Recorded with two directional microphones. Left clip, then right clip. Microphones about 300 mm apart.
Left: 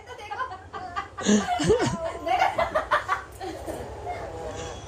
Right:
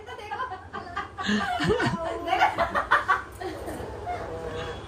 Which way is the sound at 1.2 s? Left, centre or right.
Centre.